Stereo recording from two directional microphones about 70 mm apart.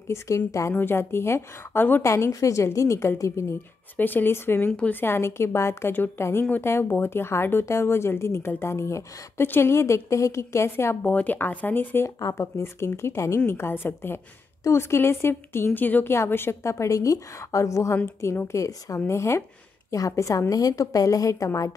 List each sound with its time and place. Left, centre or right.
0.5 s a woman's voice: left
0.7 s a woman's voice: left
2.0 s a woman's voice: left
3.9 s speech: left
4.6 s a woman's voice: centre
5.0 s a woman's voice: left
11.0 s speech: left
12.2 s a woman's voice: left
12.6 s a woman's voice: left